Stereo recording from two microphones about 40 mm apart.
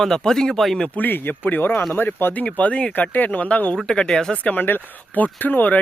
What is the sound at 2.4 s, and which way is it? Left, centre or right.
Speech, left.